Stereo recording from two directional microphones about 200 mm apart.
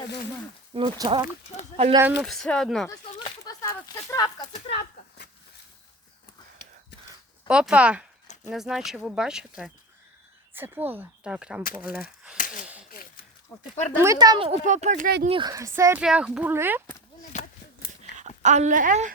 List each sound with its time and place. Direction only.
0.7 s speech: 25° right (ahead or behind)
2.0 s speech: 10° right (ahead or behind)
2.2 s speech: centre (ahead or behind)
3.2 s speech: 20° left (ahead or behind)
7.4 s speech: 5° right (ahead or behind)
12.6 s a sound: 5° right (ahead or behind)
13.9 s speech: 15° right (ahead or behind); by 15.1 s 40° right (ahead or behind)
15.3 s speech: 20° right (ahead or behind)
17.3 s a sound: 35° left (ahead or behind)
18.2 s speech: 35° right (ahead or behind)